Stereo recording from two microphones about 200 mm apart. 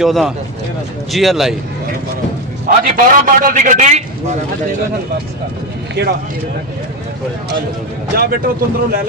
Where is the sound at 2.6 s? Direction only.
45° right (ahead or behind).